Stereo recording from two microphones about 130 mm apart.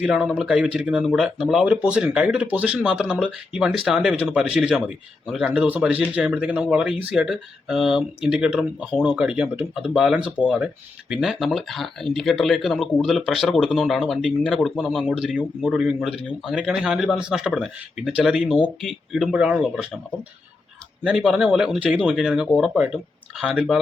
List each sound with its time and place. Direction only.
0.0 s speech: 10° right (ahead or behind)
21.0 s speech: 5° right (ahead or behind)